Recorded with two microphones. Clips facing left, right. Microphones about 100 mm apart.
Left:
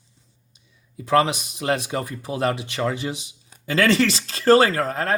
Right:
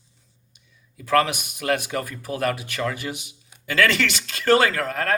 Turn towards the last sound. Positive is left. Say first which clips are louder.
# left 2 dB
turn(degrees=30)  # may be behind; listen again after turning